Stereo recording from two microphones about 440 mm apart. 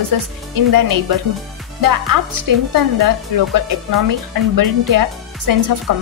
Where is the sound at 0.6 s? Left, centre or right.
Right.